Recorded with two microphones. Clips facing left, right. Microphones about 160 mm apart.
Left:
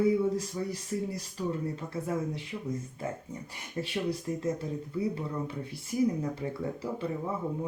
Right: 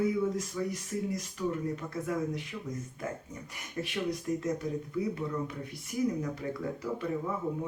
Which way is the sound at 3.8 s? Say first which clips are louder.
Left 1 dB; 30° left (ahead or behind).